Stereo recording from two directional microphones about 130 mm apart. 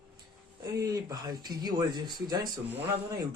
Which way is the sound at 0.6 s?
30° right (ahead or behind).